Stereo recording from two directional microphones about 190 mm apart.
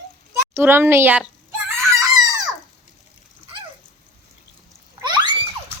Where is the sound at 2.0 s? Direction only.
20° right (ahead or behind).